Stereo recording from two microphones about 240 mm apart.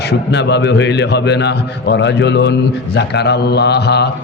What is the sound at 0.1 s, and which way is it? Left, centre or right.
A man's voice, left.